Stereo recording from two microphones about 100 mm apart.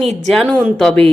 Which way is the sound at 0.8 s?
5° left (ahead or behind).